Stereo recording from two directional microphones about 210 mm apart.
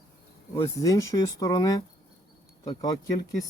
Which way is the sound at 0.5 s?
15° left (ahead or behind).